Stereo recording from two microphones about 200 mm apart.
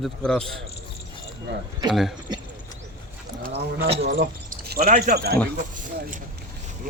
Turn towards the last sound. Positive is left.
turn(degrees=-40)  # may be behind; listen again after turning